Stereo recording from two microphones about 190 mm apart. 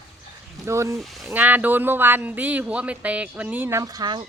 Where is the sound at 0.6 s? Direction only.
15° right (ahead or behind).